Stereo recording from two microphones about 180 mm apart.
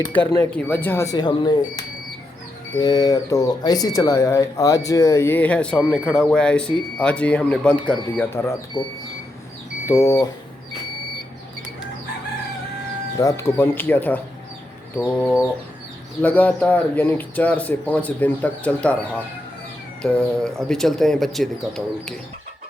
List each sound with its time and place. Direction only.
0.0 s speech: 10° left (ahead or behind)
9.8 s speech: 15° left (ahead or behind)
13.1 s speech: 15° left (ahead or behind)
16.2 s speech: 10° left (ahead or behind)